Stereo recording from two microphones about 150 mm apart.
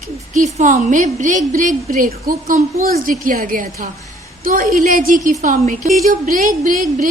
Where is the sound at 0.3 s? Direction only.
55° right (ahead or behind).